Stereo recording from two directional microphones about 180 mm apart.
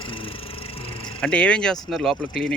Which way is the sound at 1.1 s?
5° left (ahead or behind).